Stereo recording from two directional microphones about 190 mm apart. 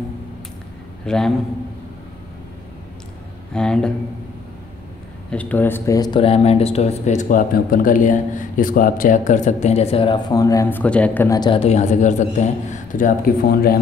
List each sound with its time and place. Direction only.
1.0 s a man's voice: 5° left (ahead or behind)
3.5 s a man's voice: 5° left (ahead or behind)
5.3 s speech: 10° left (ahead or behind)
11.3 s speech: 25° left (ahead or behind); by 13.7 s 50° left (ahead or behind)